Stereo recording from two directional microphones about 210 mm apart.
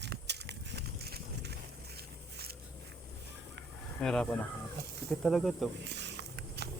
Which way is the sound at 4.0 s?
5° left (ahead or behind).